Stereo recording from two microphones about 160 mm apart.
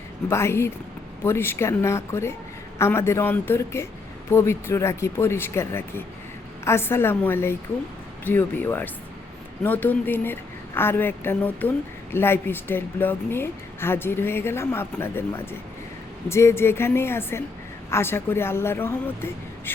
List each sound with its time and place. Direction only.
0.3 s a woman's voice: 15° left (ahead or behind)